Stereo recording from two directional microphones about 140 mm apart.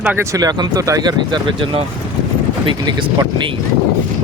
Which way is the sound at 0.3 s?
25° right (ahead or behind).